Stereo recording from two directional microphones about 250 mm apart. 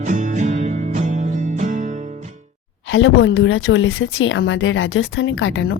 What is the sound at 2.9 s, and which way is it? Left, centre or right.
A woman's voice, left.